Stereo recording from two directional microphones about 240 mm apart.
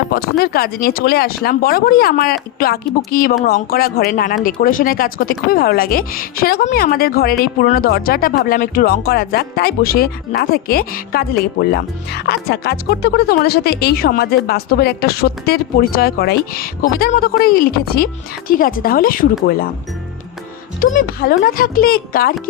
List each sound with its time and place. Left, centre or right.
0.1 s speech: left
20.8 s speech: left